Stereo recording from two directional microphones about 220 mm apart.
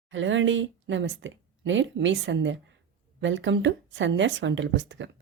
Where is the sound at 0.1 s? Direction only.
60° right (ahead or behind).